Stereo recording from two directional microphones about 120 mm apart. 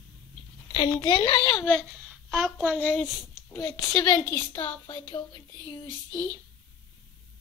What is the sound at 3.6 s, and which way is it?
Speech, 30° left (ahead or behind).